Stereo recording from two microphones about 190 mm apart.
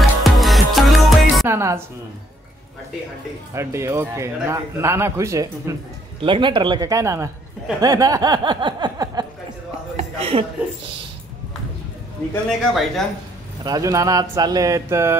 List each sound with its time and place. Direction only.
0.2 s music: centre (ahead or behind)
1.5 s a man's voice: 15° right (ahead or behind)
3.5 s a man's voice: 15° right (ahead or behind)
9.9 s a sound: 30° right (ahead or behind)
12.4 s speech: centre (ahead or behind)
13.7 s a man's voice: 15° right (ahead or behind)